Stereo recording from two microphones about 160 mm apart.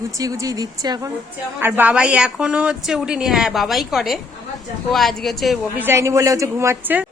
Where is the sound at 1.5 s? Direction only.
10° right (ahead or behind).